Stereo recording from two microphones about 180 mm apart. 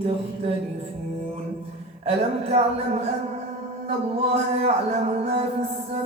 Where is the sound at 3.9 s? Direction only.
35° right (ahead or behind).